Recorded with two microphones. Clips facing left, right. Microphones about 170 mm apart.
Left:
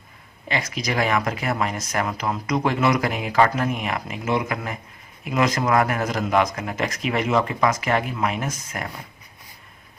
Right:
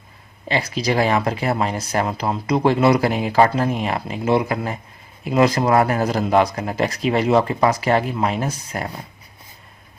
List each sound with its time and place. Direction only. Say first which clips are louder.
0.4 s speech: right 5 dB; 30° right (ahead or behind)